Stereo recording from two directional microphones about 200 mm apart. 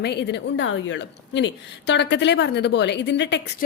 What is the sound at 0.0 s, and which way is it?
A woman's voice, 55° left (ahead or behind).